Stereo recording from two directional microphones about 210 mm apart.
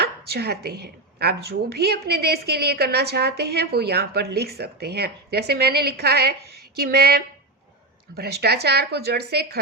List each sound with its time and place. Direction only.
0.0 s a woman's voice: 50° right (ahead or behind)